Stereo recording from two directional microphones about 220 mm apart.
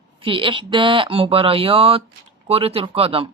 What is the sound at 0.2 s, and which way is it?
Speech, 25° right (ahead or behind).